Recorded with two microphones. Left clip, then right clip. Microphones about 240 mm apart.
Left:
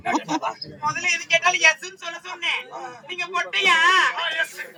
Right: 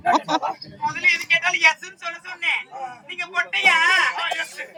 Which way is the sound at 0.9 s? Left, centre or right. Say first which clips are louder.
Right 3 dB; centre.